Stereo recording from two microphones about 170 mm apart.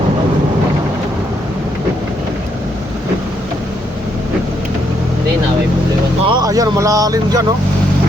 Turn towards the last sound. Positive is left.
turn(degrees=-20)  # may be behind; listen again after turning